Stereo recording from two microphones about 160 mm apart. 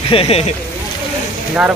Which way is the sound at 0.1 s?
40° left (ahead or behind).